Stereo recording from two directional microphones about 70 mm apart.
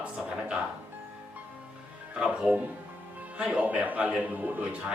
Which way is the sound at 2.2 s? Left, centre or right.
Centre.